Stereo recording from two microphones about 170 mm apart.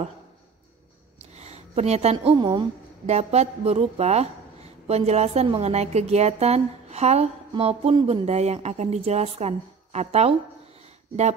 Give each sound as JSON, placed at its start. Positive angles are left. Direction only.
{"t": 1.4, "sound": "a sound", "side_deg": -40}
{"t": 2.3, "sound": "a woman's voice", "side_deg": -25}
{"t": 3.1, "sound": "a woman's voice", "side_deg": -40}